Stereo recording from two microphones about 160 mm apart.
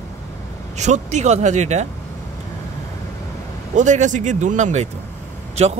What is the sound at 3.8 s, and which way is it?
Speech, 50° right (ahead or behind).